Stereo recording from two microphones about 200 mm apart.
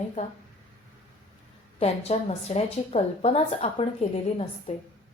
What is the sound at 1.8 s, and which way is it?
A woman's voice, 30° left (ahead or behind).